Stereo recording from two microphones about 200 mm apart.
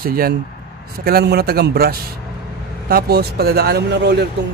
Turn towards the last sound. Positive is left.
turn(degrees=-55)  # may be behind; listen again after turning